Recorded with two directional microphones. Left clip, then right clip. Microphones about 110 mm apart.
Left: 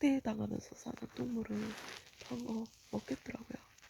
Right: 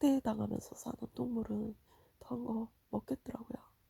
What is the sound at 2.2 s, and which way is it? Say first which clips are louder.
Speech: right 3 dB; 25° right (ahead or behind).